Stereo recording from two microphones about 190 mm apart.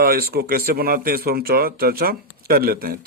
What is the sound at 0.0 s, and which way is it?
Speech, 50° right (ahead or behind).